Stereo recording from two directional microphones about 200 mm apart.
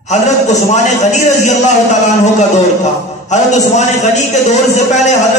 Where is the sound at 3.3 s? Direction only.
35° left (ahead or behind).